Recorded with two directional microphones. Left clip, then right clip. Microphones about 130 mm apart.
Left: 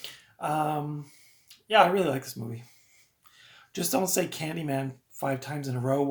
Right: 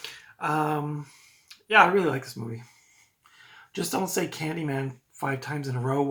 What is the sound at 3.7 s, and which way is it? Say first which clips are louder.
Speech: left 1 dB; 35° left (ahead or behind).